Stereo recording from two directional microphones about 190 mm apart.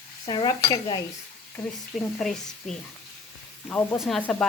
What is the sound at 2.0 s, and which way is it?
Speech, centre (ahead or behind).